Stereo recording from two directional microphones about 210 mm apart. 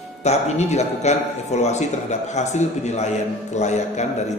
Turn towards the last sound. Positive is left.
turn(degrees=35)  # may be behind; listen again after turning